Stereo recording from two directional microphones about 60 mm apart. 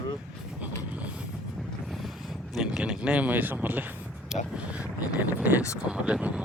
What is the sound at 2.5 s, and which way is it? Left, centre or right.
Speech, centre.